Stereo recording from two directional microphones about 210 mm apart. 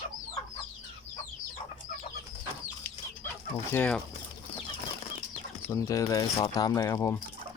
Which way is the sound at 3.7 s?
5° left (ahead or behind).